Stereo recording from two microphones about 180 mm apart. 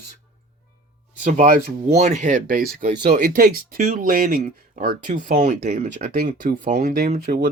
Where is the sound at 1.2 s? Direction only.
45° right (ahead or behind).